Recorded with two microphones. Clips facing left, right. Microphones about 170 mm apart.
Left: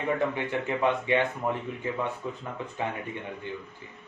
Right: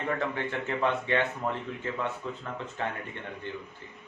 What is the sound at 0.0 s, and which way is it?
Speech, 15° left (ahead or behind).